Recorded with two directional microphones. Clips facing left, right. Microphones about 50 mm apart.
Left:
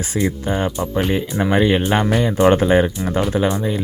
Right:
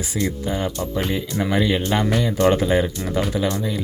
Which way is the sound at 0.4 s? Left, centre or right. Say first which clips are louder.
Left 3 dB; left.